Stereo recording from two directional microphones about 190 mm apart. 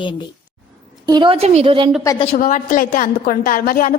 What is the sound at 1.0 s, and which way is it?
Speech, 25° right (ahead or behind).